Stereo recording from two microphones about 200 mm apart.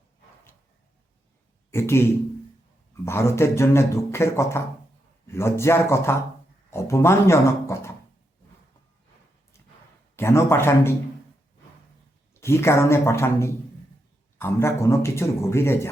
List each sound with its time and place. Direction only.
1.7 s a man's voice: 10° left (ahead or behind)
10.2 s a man's voice: 15° left (ahead or behind)
12.3 s a man's voice: 15° left (ahead or behind)